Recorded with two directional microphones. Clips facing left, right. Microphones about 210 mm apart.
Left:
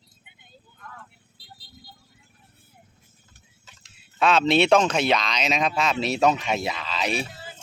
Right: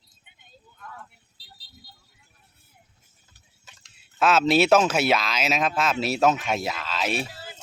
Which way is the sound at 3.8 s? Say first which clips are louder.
Even; 5° right (ahead or behind).